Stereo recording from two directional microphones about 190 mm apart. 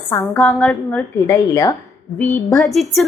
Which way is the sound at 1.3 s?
20° left (ahead or behind).